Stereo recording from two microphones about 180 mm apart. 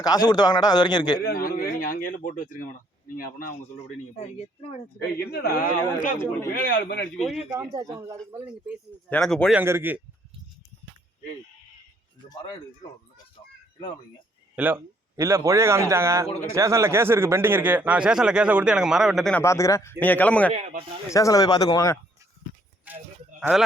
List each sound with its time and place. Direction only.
0.0 s a man's voice: 20° left (ahead or behind)
1.2 s speech: 55° left (ahead or behind)
5.3 s speech: 60° left (ahead or behind)
7.2 s speech: 5° right (ahead or behind)
9.0 s speech: 5° left (ahead or behind)
9.6 s speech: 10° right (ahead or behind)
14.5 s speech: 10° right (ahead or behind)
19.4 s speech: 15° left (ahead or behind)
20.5 s speech: 35° right (ahead or behind)
21.1 s a man's voice: 20° left (ahead or behind)
23.4 s speech: centre (ahead or behind)